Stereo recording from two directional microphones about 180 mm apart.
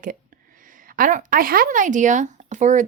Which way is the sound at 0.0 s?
50° right (ahead or behind).